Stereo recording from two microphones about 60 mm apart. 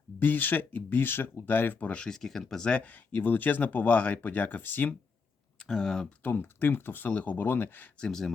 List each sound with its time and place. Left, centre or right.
0.2 s speech: left
2.0 s speech: centre
2.6 s speech: left
5.5 s speech: centre
6.2 s speech: left
7.9 s speech: centre